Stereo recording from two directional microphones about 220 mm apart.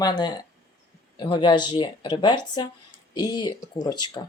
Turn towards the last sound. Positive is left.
turn(degrees=20)  # may be behind; listen again after turning